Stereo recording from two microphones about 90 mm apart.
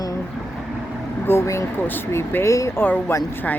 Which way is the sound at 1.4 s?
35° left (ahead or behind).